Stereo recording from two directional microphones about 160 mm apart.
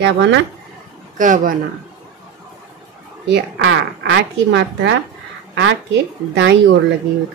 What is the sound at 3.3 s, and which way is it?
Speech, 90° right.